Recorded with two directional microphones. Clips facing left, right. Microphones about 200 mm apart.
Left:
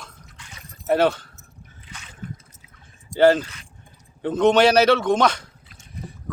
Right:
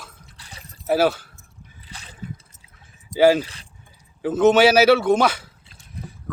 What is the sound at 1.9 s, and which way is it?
Drip, 35° right (ahead or behind).